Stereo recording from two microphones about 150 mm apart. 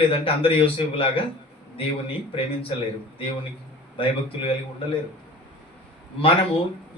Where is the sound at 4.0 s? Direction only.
35° left (ahead or behind).